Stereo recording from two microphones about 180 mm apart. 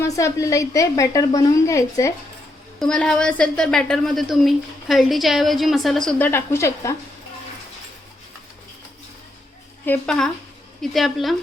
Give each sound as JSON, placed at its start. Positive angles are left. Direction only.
{"t": 0.0, "sound": "a woman's voice", "side_deg": 15}
{"t": 2.7, "sound": "a woman's voice", "side_deg": 5}
{"t": 9.8, "sound": "a woman's voice", "side_deg": 5}